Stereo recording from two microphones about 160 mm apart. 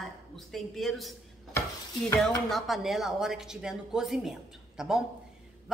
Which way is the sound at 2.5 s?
Centre (ahead or behind).